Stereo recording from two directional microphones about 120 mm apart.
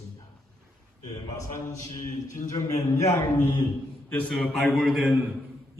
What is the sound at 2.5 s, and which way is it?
Speech, 25° left (ahead or behind).